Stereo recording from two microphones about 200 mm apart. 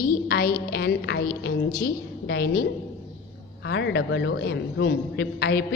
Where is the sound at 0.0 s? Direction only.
50° left (ahead or behind).